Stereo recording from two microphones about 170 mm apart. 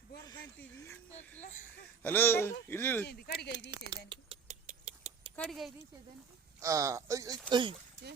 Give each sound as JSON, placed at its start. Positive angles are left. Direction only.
{"t": 1.4, "sound": "a sound", "side_deg": 45}
{"t": 2.0, "sound": "speech", "side_deg": 15}
{"t": 3.4, "sound": "speech", "side_deg": 75}
{"t": 3.7, "sound": "speech", "side_deg": -25}
{"t": 4.4, "sound": "a sound", "side_deg": -50}
{"t": 5.4, "sound": "speech", "side_deg": 0}
{"t": 6.6, "sound": "speech", "side_deg": -20}
{"t": 7.5, "sound": "speech", "side_deg": -30}